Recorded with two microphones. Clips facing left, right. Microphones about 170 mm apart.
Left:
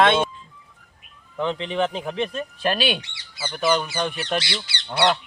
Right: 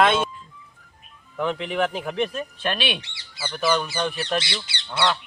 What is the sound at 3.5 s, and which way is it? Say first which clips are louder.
Speech: left 1 dB; centre (ahead or behind).